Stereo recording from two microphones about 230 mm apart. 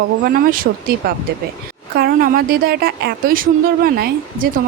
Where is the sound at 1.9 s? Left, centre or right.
Right.